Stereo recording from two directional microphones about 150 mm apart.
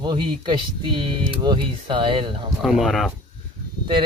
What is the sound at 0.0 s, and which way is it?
Speech, 30° right (ahead or behind).